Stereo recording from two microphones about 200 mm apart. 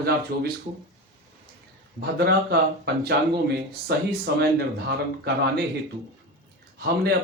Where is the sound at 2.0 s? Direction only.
55° right (ahead or behind).